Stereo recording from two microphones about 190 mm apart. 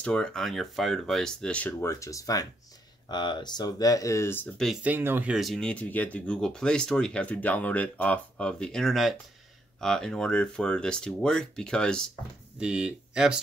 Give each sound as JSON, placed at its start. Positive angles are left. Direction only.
{"t": 0.0, "sound": "speech", "side_deg": 5}
{"t": 4.6, "sound": "speech", "side_deg": -10}